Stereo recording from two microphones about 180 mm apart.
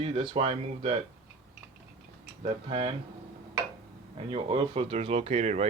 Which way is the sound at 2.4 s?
30° right (ahead or behind).